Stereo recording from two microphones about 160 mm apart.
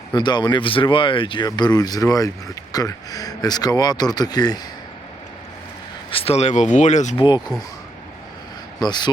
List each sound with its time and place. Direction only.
0.1 s speech: 25° left (ahead or behind)
6.1 s speech: 35° left (ahead or behind)
7.2 s speech: 30° left (ahead or behind)
8.8 s speech: 25° left (ahead or behind)